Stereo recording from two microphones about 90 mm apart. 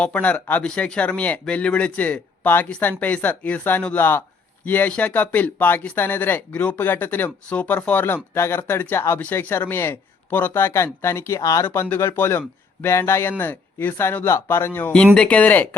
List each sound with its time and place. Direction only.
0.0 s speech: 15° left (ahead or behind); by 11.6 s 40° left (ahead or behind)
11.6 s speech: 25° left (ahead or behind)
14.9 s speech: 10° left (ahead or behind)